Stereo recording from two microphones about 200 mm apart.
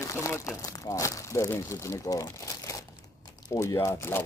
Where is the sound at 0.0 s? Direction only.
15° left (ahead or behind).